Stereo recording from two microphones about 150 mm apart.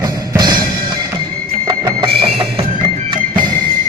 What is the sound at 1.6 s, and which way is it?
Music, 30° right (ahead or behind).